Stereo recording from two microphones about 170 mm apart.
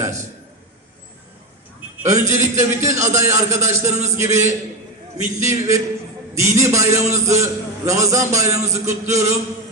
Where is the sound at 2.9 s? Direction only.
15° right (ahead or behind).